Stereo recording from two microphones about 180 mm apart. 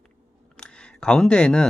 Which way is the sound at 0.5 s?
5° left (ahead or behind).